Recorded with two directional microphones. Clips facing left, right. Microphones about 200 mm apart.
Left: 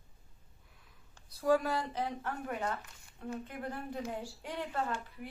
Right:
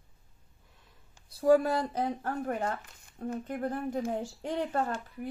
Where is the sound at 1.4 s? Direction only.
35° right (ahead or behind).